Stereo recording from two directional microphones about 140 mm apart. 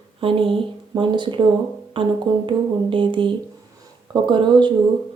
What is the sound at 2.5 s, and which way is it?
Speech, 35° right (ahead or behind).